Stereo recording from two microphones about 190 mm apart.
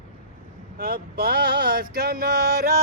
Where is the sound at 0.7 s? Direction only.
50° right (ahead or behind).